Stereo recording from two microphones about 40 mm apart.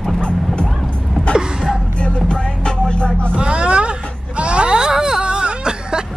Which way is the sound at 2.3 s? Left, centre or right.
Left.